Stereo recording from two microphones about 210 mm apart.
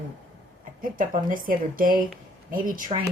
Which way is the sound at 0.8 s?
40° right (ahead or behind).